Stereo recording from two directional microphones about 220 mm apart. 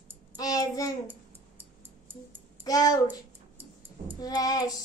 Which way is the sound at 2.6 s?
15° left (ahead or behind).